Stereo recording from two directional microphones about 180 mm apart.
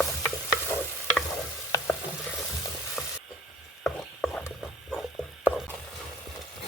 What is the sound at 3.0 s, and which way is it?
Frying, centre (ahead or behind).